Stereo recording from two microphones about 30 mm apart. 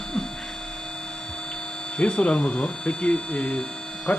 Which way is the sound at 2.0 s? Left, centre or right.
Left.